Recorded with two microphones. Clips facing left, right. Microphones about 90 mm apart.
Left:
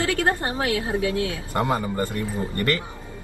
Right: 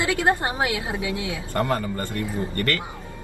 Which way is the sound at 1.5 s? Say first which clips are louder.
Right 2 dB; 20° left (ahead or behind).